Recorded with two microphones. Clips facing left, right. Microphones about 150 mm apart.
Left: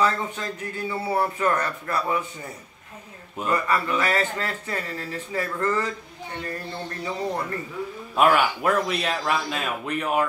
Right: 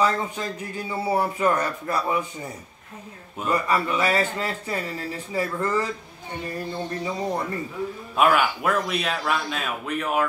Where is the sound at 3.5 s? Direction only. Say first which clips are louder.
Right 1 dB; 15° right (ahead or behind).